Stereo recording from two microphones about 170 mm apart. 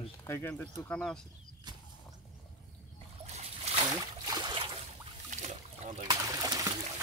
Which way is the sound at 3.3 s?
40° right (ahead or behind).